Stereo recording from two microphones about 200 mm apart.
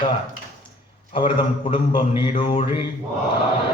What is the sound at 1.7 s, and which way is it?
Speech, 25° left (ahead or behind).